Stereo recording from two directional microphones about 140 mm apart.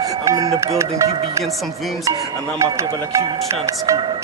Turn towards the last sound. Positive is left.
turn(degrees=-20)  # may be behind; listen again after turning